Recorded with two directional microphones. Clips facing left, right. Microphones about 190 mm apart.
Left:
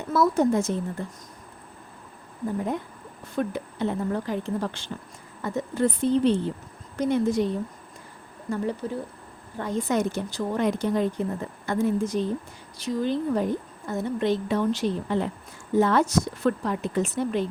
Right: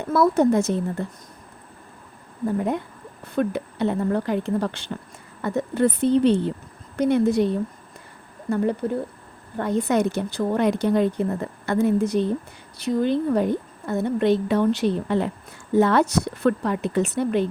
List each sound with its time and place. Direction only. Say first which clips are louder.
0.1 s a woman's voice: right 3 dB; 60° right (ahead or behind)
3.3 s a woman's voice: right 4 dB; 65° right (ahead or behind)
8.8 s a woman's voice: right 5 dB; 60° right (ahead or behind)